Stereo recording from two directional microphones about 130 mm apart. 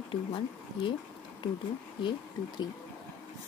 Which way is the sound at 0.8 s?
40° left (ahead or behind).